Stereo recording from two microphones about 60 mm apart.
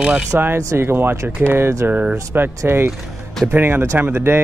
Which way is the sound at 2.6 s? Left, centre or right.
Right.